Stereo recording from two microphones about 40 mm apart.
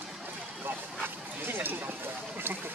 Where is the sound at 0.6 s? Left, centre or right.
Right.